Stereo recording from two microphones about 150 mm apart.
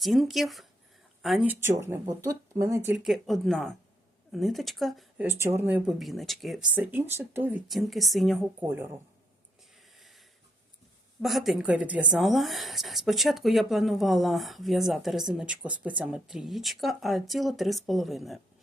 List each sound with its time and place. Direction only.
0.0 s speech: centre (ahead or behind)
1.5 s speech: 15° right (ahead or behind)
2.9 s speech: 5° right (ahead or behind)
5.1 s speech: 15° right (ahead or behind)
7.7 s speech: centre (ahead or behind)
11.2 s speech: centre (ahead or behind)